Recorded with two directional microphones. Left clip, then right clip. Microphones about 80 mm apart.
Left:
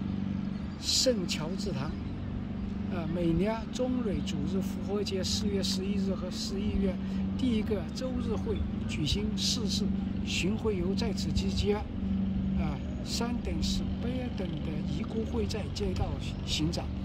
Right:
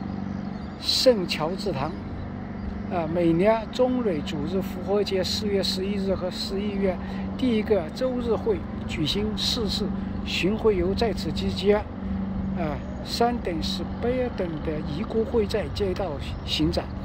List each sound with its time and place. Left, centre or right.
0.8 s speech: right
2.9 s speech: right